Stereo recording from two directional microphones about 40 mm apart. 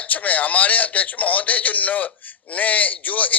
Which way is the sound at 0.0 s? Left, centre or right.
Left.